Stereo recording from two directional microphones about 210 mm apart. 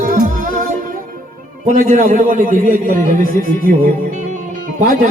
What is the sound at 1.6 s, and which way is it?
A man's voice, 40° right (ahead or behind).